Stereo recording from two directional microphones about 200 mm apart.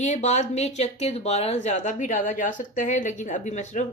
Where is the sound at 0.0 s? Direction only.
35° left (ahead or behind).